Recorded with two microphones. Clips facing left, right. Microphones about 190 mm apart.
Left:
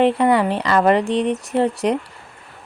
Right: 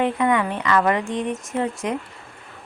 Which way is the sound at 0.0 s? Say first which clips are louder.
Left 5 dB; 35° left (ahead or behind).